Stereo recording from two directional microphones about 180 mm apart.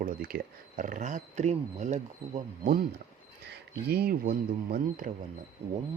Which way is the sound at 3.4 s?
65° right (ahead or behind).